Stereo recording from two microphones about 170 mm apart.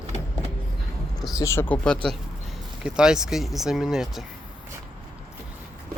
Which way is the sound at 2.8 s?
5° right (ahead or behind).